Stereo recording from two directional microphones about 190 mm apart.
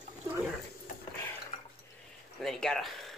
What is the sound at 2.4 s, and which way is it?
Speech, 5° left (ahead or behind).